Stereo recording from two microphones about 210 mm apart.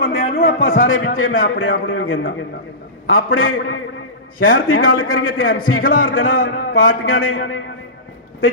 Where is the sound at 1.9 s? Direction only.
65° left (ahead or behind).